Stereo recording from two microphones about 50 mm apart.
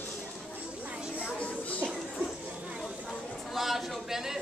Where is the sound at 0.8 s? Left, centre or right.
Right.